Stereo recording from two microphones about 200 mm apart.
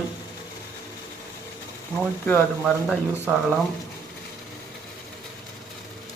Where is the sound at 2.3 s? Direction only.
10° left (ahead or behind).